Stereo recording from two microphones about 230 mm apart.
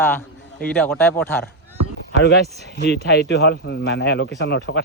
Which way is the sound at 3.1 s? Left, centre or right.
Left.